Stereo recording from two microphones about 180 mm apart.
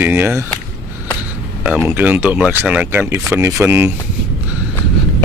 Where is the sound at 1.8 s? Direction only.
10° right (ahead or behind).